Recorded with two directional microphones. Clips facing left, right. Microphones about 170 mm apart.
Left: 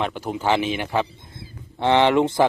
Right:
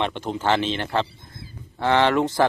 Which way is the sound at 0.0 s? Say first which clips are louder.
Even; 5° left (ahead or behind).